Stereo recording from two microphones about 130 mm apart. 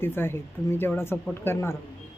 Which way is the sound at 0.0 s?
15° left (ahead or behind).